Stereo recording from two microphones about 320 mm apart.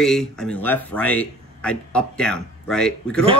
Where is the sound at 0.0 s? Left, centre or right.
Centre.